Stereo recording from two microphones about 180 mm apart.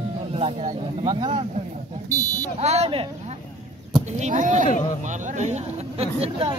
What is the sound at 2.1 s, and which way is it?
Buzzer, 40° left (ahead or behind).